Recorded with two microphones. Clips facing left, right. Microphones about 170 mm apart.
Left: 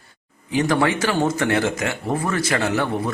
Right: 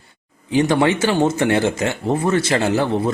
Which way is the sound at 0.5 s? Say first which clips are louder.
Right 3 dB; 25° right (ahead or behind).